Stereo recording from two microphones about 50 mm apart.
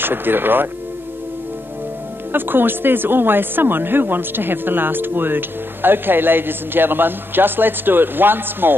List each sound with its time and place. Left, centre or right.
0.0 s speech: right
2.3 s speech: right